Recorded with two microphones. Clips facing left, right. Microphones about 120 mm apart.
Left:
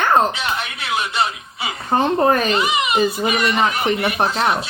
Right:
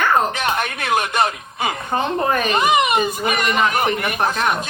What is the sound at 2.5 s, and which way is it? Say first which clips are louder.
A child's voice: right 3 dB; 50° right (ahead or behind).